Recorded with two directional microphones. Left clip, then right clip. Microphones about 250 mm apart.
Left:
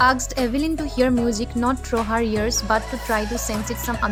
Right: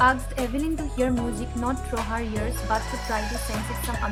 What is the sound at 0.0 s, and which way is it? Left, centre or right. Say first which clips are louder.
Speech: left 3 dB; left.